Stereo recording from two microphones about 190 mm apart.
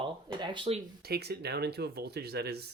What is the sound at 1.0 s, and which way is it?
Speech, 55° right (ahead or behind).